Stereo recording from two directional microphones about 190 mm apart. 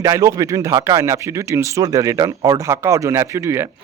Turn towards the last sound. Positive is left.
turn(degrees=-15)  # may be behind; listen again after turning